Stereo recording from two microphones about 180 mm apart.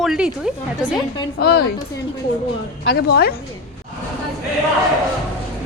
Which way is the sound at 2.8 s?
65° left (ahead or behind).